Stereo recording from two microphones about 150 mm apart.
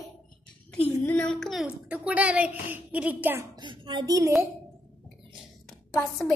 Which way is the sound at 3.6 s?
30° right (ahead or behind).